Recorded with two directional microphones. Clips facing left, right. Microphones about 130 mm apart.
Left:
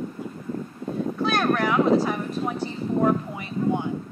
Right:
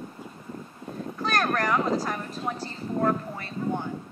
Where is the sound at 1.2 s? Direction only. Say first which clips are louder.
Left 3 dB; 5° left (ahead or behind).